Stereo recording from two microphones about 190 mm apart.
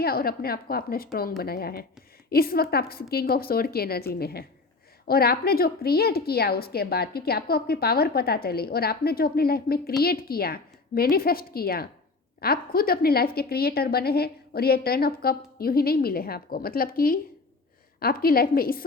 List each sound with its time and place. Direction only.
0.0 s a woman's voice: 55° left (ahead or behind)